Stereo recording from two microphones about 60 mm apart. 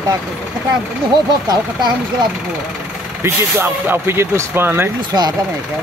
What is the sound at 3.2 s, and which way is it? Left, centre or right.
Speech, right.